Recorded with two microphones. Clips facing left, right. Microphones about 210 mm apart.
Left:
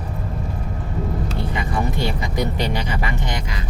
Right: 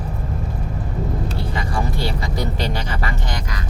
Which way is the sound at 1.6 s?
20° left (ahead or behind).